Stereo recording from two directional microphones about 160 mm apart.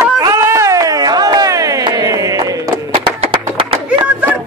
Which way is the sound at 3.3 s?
30° right (ahead or behind).